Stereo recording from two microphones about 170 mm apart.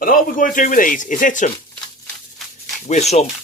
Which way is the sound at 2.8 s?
40° left (ahead or behind).